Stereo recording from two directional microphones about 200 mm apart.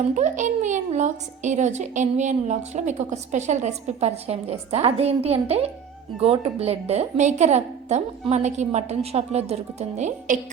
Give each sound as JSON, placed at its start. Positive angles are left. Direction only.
{"t": 0.1, "sound": "a woman's voice", "side_deg": -40}